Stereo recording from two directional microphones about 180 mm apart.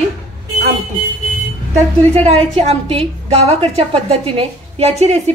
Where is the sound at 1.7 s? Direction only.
35° right (ahead or behind).